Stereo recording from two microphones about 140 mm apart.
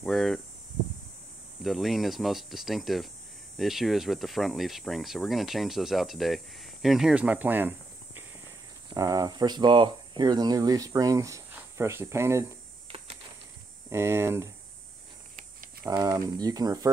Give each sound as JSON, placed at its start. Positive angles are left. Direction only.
{"t": 0.0, "sound": "speech", "side_deg": 0}
{"t": 1.6, "sound": "speech", "side_deg": 0}
{"t": 8.9, "sound": "speech", "side_deg": -25}
{"t": 13.8, "sound": "speech", "side_deg": -15}
{"t": 15.9, "sound": "speech", "side_deg": -30}